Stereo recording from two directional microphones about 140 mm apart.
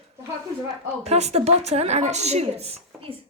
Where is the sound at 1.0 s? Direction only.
50° right (ahead or behind).